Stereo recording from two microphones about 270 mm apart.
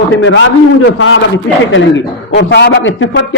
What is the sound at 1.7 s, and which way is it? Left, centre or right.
A man's voice, left.